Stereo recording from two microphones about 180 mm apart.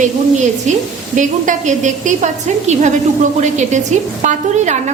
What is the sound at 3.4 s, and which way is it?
A woman's voice, 40° right (ahead or behind).